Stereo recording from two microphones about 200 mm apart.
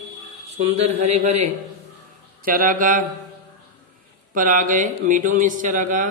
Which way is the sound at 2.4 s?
45° right (ahead or behind).